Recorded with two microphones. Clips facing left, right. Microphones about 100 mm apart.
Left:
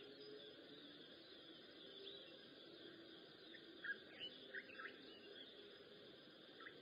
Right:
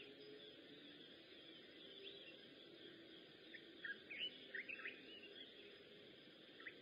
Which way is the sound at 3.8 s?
20° left (ahead or behind).